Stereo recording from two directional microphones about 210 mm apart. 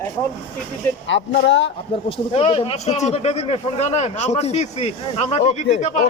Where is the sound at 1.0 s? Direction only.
55° left (ahead or behind).